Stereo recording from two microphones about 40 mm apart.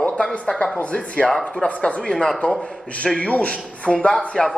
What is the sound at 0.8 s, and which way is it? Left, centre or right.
Speech, left.